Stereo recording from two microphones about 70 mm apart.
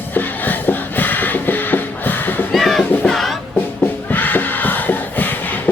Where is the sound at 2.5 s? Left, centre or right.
Centre.